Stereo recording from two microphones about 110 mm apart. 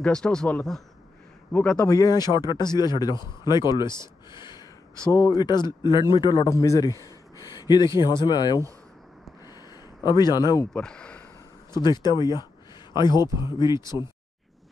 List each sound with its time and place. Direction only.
0.0 s speech: 5° left (ahead or behind)
1.9 s speech: 35° left (ahead or behind)
4.3 s a sound: 45° left (ahead or behind)
5.1 s speech: 35° left (ahead or behind)
6.3 s speech: 30° left (ahead or behind)
10.0 s speech: 40° left (ahead or behind)
10.7 s a sound: 10° left (ahead or behind)
11.7 s speech: 40° left (ahead or behind)